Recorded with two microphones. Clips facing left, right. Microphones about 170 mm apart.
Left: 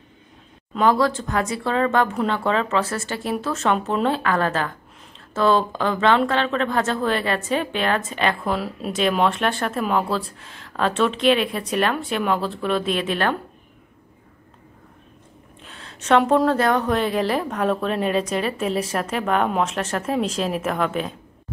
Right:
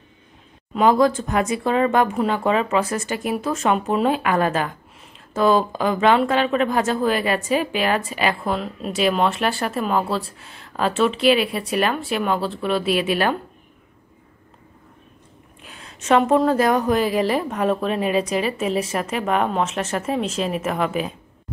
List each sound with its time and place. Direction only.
0.8 s a woman's voice: 20° right (ahead or behind)
15.6 s a woman's voice: 5° right (ahead or behind)